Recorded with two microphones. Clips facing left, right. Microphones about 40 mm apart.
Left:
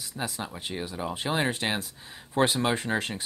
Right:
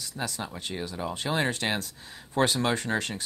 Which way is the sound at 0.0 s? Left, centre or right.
Centre.